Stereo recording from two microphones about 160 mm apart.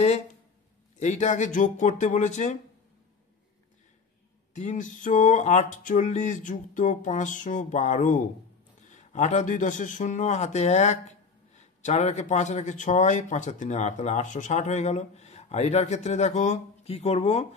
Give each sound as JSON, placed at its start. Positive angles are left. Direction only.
{"t": 0.9, "sound": "a man's voice", "side_deg": 45}
{"t": 4.6, "sound": "a man's voice", "side_deg": 50}